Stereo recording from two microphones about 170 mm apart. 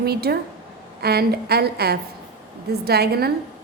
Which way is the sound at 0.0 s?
70° right (ahead or behind).